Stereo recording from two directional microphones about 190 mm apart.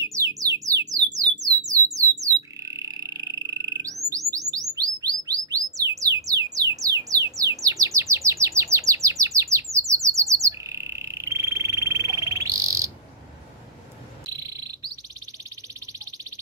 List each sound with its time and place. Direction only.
0.0 s music: 15° right (ahead or behind)
2.0 s a sound: 15° right (ahead or behind)
4.1 s bird: 20° right (ahead or behind)
7.2 s chirp: 15° right (ahead or behind)